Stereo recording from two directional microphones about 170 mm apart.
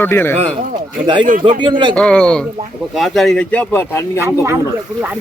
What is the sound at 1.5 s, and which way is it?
Speech, 30° right (ahead or behind).